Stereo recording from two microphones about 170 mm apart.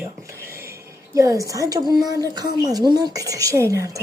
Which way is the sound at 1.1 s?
20° right (ahead or behind).